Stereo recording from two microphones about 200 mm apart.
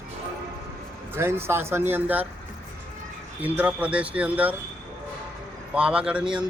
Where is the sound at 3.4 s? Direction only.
10° right (ahead or behind).